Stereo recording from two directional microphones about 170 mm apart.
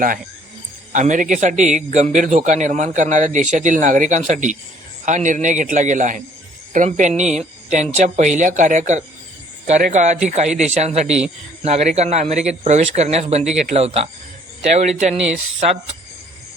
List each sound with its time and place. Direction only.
0.9 s a man's voice: 45° right (ahead or behind)